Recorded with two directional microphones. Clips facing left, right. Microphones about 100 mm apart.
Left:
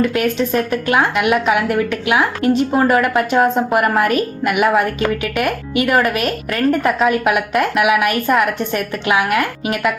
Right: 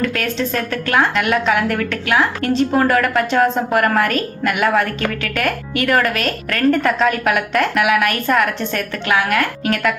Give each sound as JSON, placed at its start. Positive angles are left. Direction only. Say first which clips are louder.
{"t": 0.0, "sound": "a woman's voice", "louder": "left 4 dB", "side_deg": 10}